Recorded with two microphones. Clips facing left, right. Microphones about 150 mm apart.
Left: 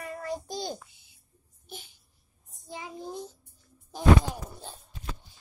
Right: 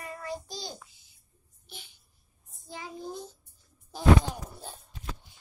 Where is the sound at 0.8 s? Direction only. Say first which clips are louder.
Even; 60° left (ahead or behind).